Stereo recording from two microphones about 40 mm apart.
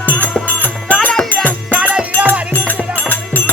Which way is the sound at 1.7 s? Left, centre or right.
Right.